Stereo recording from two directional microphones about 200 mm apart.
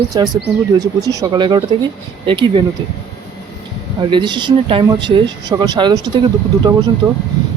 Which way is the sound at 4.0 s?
25° right (ahead or behind).